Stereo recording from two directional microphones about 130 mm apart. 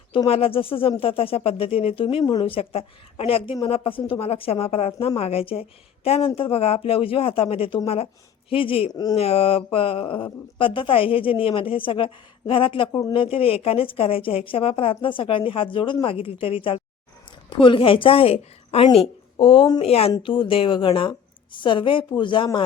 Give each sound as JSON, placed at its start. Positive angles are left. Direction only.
{"t": 0.3, "sound": "a woman's voice", "side_deg": 45}
{"t": 8.9, "sound": "a woman's voice", "side_deg": 30}
{"t": 9.1, "sound": "a woman's voice", "side_deg": 50}